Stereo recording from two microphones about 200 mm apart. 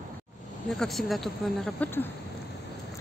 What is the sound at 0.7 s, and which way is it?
Speech, centre (ahead or behind).